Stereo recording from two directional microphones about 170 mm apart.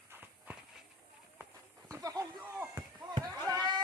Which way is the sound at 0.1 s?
10° right (ahead or behind).